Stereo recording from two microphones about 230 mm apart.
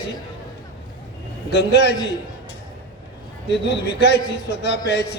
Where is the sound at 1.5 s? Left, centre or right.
Left.